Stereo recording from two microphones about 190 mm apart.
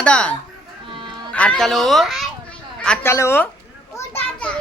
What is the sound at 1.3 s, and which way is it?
A child's voice, 5° left (ahead or behind).